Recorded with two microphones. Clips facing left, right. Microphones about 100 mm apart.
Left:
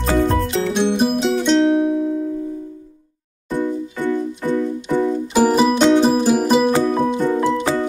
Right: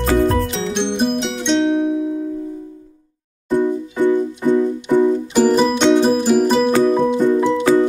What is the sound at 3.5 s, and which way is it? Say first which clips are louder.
Music: right 5 dB; 15° right (ahead or behind).